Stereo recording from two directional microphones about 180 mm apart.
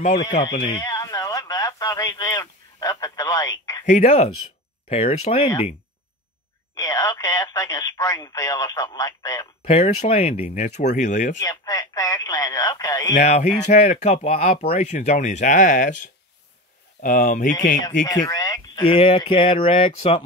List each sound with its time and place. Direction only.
0.1 s speech: 80° left
0.5 s a sound: 25° left (ahead or behind)
3.8 s speech: 40° left (ahead or behind)
6.8 s speech: 20° left (ahead or behind)
9.7 s speech: 35° left (ahead or behind)
11.3 s speech: 20° left (ahead or behind)
13.1 s speech: 40° left (ahead or behind)
18.0 s speech: 20° left (ahead or behind)